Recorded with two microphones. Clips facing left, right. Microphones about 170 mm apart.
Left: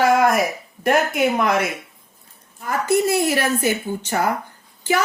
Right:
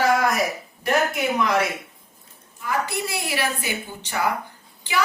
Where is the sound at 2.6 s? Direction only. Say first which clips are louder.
Left 7 dB; 45° left (ahead or behind).